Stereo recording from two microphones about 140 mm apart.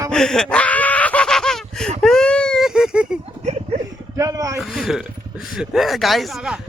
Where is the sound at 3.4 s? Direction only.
50° right (ahead or behind).